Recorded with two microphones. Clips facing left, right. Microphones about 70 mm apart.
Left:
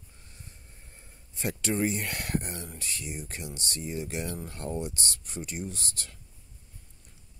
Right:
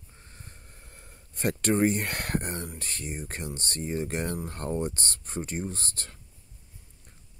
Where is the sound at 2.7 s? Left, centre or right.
Right.